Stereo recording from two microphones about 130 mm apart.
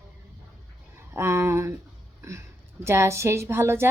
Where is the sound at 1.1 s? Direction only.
20° right (ahead or behind).